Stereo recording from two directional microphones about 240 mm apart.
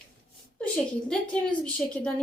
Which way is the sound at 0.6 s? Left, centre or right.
Centre.